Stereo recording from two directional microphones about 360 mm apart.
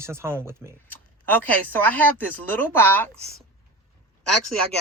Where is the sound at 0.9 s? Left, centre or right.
Centre.